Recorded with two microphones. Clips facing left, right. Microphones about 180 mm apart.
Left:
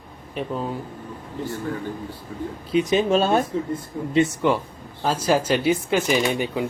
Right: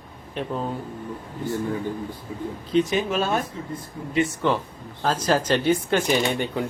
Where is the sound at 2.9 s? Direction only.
30° left (ahead or behind).